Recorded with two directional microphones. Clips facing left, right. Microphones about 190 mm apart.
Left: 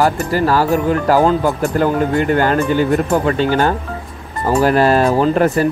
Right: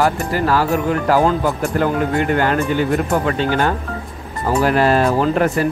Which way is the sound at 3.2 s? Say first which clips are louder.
Left 3 dB; 35° left (ahead or behind).